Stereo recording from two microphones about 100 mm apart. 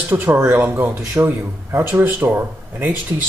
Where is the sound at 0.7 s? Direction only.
30° right (ahead or behind).